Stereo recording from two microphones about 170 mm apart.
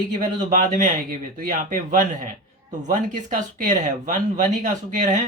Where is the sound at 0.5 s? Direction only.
50° right (ahead or behind).